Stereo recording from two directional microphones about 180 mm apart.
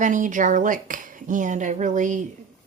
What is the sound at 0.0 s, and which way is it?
Speech, 45° right (ahead or behind).